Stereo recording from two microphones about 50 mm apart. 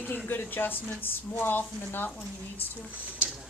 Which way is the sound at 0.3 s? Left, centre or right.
Left.